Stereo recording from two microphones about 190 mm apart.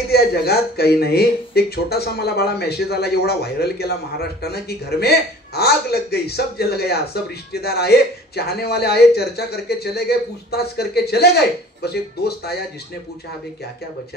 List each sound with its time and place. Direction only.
0.1 s speech: 55° left (ahead or behind)